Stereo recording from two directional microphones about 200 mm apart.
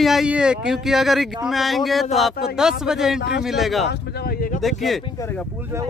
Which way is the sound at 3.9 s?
55° left (ahead or behind).